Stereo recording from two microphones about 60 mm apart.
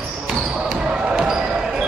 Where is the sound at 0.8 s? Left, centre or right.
Centre.